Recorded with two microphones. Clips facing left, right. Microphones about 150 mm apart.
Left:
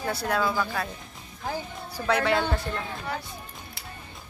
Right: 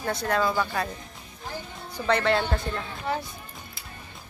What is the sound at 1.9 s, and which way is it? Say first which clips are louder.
Speech: right 1 dB; 5° left (ahead or behind).